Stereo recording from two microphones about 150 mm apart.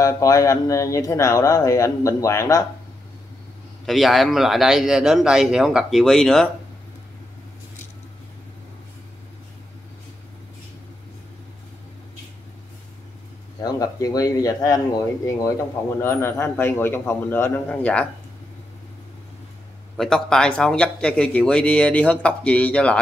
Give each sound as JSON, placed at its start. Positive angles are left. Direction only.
{"t": 0.0, "sound": "speech", "side_deg": 20}
{"t": 3.8, "sound": "speech", "side_deg": 0}
{"t": 13.6, "sound": "speech", "side_deg": 25}
{"t": 20.0, "sound": "speech", "side_deg": 5}